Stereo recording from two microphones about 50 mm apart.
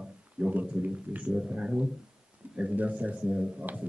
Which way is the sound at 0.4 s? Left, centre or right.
Right.